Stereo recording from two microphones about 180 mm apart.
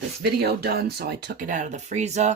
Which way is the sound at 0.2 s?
60° right (ahead or behind).